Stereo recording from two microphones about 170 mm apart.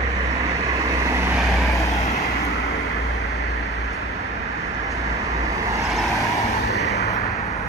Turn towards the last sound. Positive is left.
turn(degrees=75)  # may be behind; listen again after turning